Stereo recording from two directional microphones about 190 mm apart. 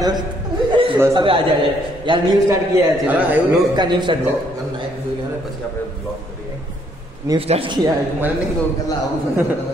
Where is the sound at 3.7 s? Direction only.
25° right (ahead or behind).